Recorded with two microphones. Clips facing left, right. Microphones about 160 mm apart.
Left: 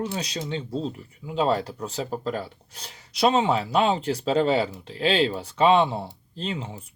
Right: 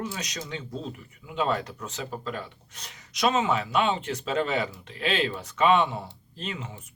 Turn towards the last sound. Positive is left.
turn(degrees=30)  # may be behind; listen again after turning